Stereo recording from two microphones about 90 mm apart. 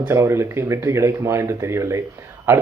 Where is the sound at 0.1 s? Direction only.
30° right (ahead or behind).